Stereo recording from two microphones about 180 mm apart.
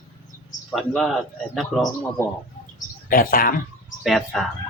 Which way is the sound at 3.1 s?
50° left (ahead or behind).